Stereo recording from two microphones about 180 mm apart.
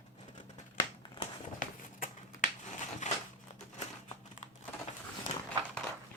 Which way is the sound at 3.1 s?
40° left (ahead or behind).